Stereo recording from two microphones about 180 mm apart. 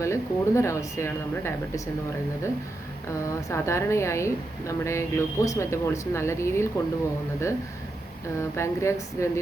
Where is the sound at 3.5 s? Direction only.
15° left (ahead or behind).